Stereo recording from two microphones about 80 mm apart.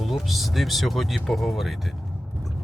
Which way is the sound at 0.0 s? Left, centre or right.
Centre.